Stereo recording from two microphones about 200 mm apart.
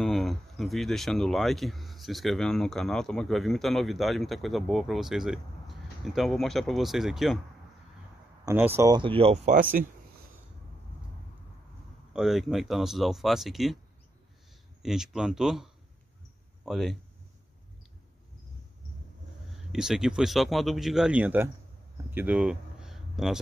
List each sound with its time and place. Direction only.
0.0 s speech: centre (ahead or behind)
8.5 s speech: 10° right (ahead or behind); by 9.6 s 30° right (ahead or behind)
9.6 s speech: 45° right (ahead or behind)
12.1 s speech: centre (ahead or behind)
14.8 s speech: centre (ahead or behind)
19.7 s speech: centre (ahead or behind)
22.1 s a sound: 5° right (ahead or behind)